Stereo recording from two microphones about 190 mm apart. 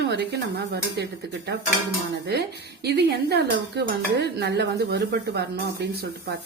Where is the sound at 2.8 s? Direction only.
60° right (ahead or behind).